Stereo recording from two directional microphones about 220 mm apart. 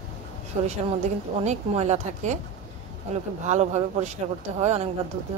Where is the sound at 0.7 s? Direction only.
30° right (ahead or behind).